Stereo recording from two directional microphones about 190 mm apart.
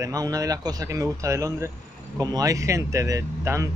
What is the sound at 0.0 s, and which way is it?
Speech, 20° right (ahead or behind).